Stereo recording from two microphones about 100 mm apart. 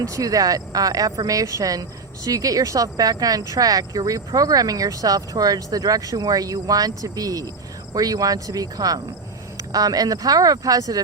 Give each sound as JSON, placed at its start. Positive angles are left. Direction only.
{"t": 0.0, "sound": "speech", "side_deg": -35}